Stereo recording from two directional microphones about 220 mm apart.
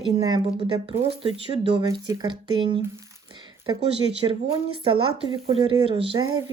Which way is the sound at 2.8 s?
15° right (ahead or behind).